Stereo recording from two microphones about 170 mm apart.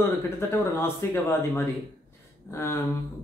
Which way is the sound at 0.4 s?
15° left (ahead or behind).